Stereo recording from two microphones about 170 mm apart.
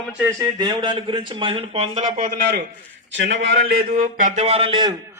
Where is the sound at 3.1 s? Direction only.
90° right.